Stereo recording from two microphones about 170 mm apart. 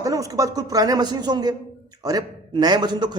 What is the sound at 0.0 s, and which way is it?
A man's voice, 20° right (ahead or behind).